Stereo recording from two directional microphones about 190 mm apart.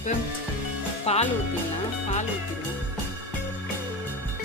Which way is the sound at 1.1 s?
35° left (ahead or behind).